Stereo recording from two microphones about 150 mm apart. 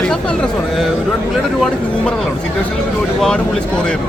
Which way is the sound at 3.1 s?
5° left (ahead or behind).